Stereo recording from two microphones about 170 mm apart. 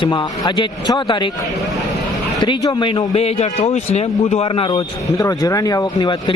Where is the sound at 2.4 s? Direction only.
25° left (ahead or behind).